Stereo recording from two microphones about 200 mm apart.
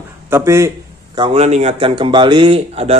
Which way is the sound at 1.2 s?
30° right (ahead or behind).